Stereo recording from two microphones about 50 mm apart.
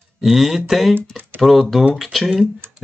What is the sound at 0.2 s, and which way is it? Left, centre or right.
Speech, centre.